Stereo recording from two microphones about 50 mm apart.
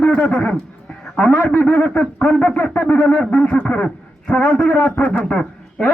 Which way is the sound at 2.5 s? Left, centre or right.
Left.